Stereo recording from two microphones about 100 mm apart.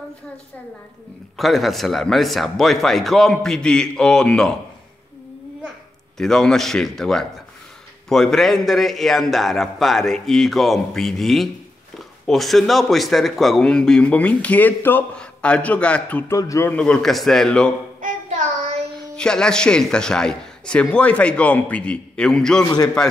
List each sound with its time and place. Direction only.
1.3 s a man's voice: centre (ahead or behind)
6.1 s a man's voice: 5° left (ahead or behind)
16.3 s speech: 30° left (ahead or behind)
16.7 s a man's voice: 10° left (ahead or behind)
19.1 s a man's voice: 10° left (ahead or behind)